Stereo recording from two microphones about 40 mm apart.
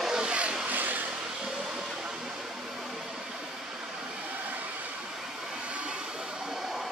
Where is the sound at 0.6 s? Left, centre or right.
Right.